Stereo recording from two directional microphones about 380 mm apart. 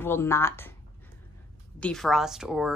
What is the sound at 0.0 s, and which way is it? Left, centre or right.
Speech, centre.